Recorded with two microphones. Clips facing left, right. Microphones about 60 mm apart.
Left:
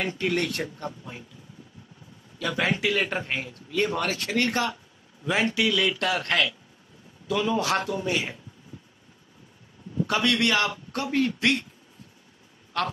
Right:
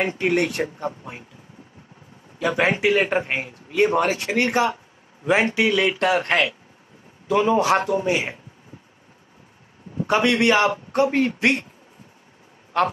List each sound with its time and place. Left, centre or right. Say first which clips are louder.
0.0 s a man's voice: right 6 dB; right
9.9 s a man's voice: right 5 dB; right
12.7 s a man's voice: right 7 dB; right